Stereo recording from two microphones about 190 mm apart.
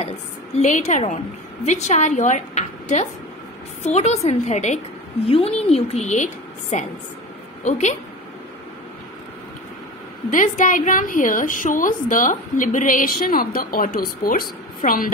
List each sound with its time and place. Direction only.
0.6 s a woman's voice: 40° left (ahead or behind)
10.3 s a woman's voice: 45° left (ahead or behind)